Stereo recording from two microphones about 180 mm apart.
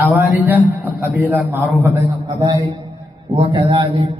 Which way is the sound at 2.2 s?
25° right (ahead or behind).